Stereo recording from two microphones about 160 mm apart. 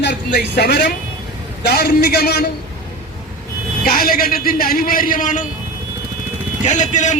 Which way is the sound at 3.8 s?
70° left (ahead or behind).